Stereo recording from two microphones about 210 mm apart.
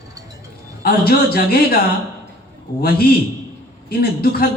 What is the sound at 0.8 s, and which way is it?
A man's voice, 45° left (ahead or behind).